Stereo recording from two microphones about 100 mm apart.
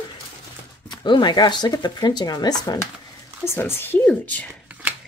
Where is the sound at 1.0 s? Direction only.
45° left (ahead or behind).